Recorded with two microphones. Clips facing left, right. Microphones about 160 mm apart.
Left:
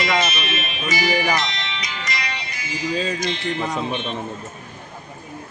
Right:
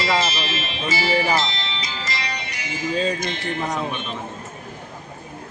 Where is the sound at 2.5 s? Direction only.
65° right (ahead or behind).